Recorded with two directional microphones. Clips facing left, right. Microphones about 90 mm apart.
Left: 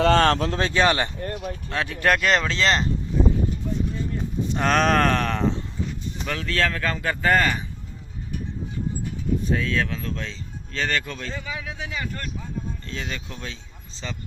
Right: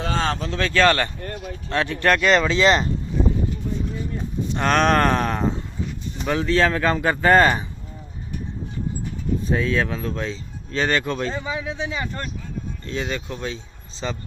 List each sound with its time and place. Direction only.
0.0 s speech: 65° left (ahead or behind)
0.6 s speech: 15° left (ahead or behind)
1.7 s speech: centre (ahead or behind)
4.5 s speech: centre (ahead or behind)
5.1 s speech: 15° right (ahead or behind)
6.2 s speech: 25° right (ahead or behind)
9.5 s speech: 25° right (ahead or behind)
13.0 s speech: 10° right (ahead or behind)
14.0 s speech: 25° right (ahead or behind)